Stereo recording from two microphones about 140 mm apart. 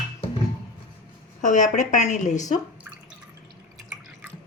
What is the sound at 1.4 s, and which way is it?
A woman's voice, 65° left (ahead or behind).